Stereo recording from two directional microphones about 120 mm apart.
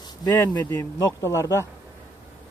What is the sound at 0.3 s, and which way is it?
Speech, 15° left (ahead or behind).